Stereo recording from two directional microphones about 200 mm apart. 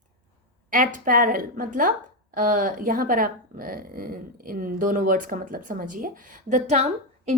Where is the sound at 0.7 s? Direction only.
40° right (ahead or behind).